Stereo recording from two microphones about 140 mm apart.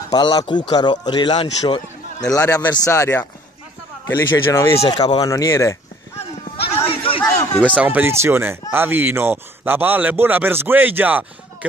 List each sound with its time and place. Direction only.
0.1 s speech: 30° left (ahead or behind)
1.6 s a sound: 25° left (ahead or behind)
2.3 s speech: 20° left (ahead or behind)
4.8 s speech: 30° left (ahead or behind)
6.9 s a sound: 40° left (ahead or behind)
7.7 s speech: 10° right (ahead or behind)